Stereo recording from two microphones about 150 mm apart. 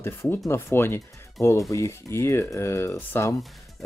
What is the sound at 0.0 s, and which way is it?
Speech, 15° left (ahead or behind).